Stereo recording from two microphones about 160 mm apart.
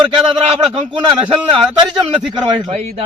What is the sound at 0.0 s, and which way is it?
A man's voice, 30° right (ahead or behind).